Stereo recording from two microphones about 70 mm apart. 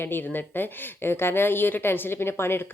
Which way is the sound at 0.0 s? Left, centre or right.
Left.